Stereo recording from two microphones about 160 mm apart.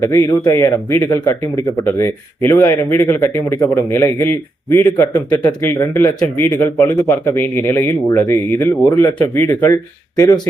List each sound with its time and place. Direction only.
0.0 s a man's voice: 20° left (ahead or behind)